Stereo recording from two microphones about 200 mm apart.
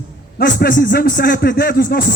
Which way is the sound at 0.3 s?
50° left (ahead or behind).